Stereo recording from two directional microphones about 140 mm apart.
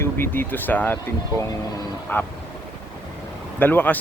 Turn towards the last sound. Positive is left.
turn(degrees=15)  # may be behind; listen again after turning